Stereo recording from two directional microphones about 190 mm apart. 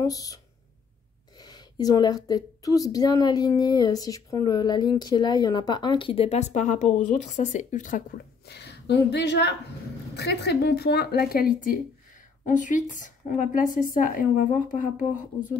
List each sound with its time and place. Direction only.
0.0 s a woman's voice: 20° left (ahead or behind); by 8.0 s 40° left (ahead or behind)
8.5 s a woman's voice: 60° left (ahead or behind); by 15.2 s 45° left (ahead or behind)